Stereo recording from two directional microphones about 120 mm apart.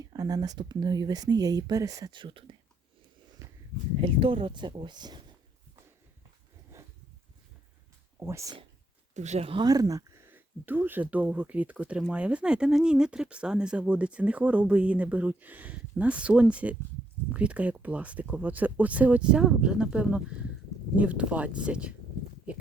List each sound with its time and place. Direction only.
0.0 s speech: 30° right (ahead or behind)
2.1 s speech: 45° right (ahead or behind)
4.0 s speech: 45° right (ahead or behind)
8.2 s speech: 25° right (ahead or behind)
9.1 s speech: 70° right (ahead or behind)
9.5 s speech: 35° right (ahead or behind); by 21.9 s 10° right (ahead or behind)